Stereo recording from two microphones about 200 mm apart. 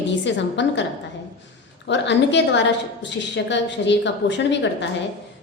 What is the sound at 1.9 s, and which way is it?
A woman's voice, 60° left (ahead or behind).